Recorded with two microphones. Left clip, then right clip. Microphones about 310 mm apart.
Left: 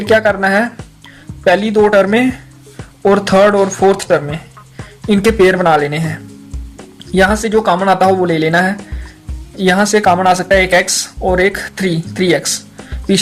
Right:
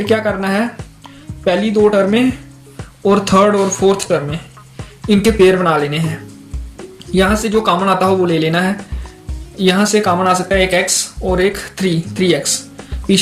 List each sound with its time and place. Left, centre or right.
0.0 s speech: left